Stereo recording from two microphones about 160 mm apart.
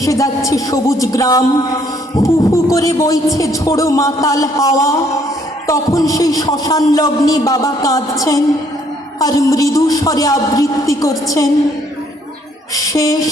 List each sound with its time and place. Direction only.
0.0 s a man's voice: 20° left (ahead or behind)
12.7 s a man's voice: 20° left (ahead or behind)